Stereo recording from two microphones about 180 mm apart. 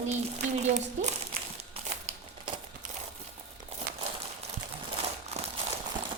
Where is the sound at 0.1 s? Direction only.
40° right (ahead or behind).